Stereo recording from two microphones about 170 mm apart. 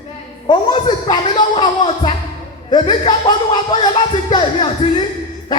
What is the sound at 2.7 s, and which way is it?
Speech, 25° left (ahead or behind).